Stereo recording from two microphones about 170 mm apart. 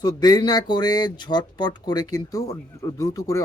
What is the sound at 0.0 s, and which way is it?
Speech, 25° left (ahead or behind).